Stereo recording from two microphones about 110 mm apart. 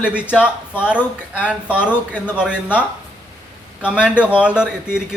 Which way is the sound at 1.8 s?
15° left (ahead or behind).